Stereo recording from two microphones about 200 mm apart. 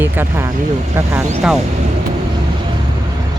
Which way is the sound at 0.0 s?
10° right (ahead or behind).